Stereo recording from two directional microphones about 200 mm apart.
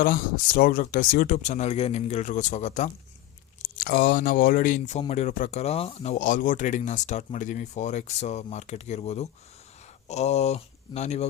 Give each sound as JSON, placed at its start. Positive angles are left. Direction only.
{"t": 0.0, "sound": "speech", "side_deg": 45}
{"t": 3.8, "sound": "speech", "side_deg": 45}